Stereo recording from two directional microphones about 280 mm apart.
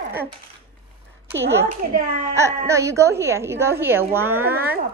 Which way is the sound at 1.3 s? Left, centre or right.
Centre.